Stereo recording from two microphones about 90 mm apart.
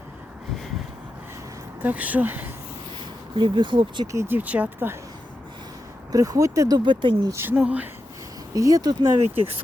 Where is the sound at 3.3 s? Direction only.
65° right (ahead or behind).